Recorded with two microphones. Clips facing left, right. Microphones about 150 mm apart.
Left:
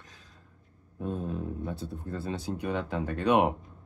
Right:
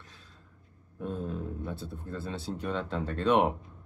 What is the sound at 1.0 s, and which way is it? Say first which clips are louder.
Speech: left 2 dB; 15° left (ahead or behind).